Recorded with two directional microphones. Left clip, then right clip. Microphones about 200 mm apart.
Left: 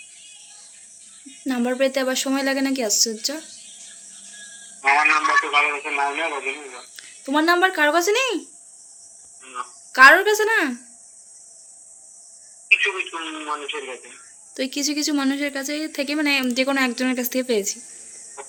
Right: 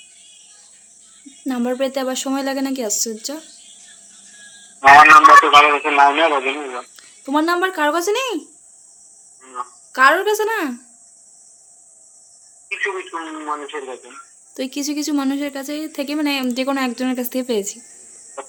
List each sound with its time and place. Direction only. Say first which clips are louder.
1.5 s speech: even; 15° right (ahead or behind)
4.8 s a man's voice: right 11 dB; 40° right (ahead or behind)
6.9 s speech: right 1 dB; 15° right (ahead or behind)
9.4 s a sound: right 3 dB; 20° right (ahead or behind)
9.9 s speech: left 2 dB; 10° right (ahead or behind)
12.8 s speech: even; 25° right (ahead or behind)
14.5 s speech: even; 15° right (ahead or behind)
18.4 s cricket: right 7 dB; 40° right (ahead or behind)